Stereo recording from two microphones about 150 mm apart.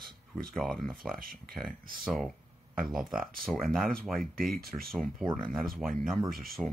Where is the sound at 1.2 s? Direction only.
85° right.